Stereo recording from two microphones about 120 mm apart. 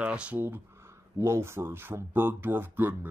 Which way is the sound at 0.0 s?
10° right (ahead or behind).